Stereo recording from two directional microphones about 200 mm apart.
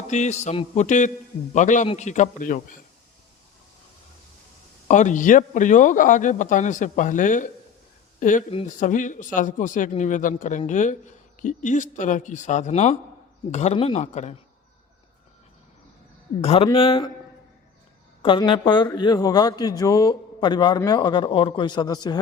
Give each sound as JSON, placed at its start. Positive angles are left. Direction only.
{"t": 0.1, "sound": "speech", "side_deg": 35}
{"t": 4.9, "sound": "speech", "side_deg": 40}
{"t": 16.4, "sound": "a man's voice", "side_deg": 30}
{"t": 18.2, "sound": "a man's voice", "side_deg": 25}